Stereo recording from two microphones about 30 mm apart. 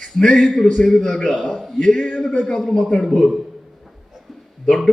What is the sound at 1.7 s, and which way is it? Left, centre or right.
A man's voice, left.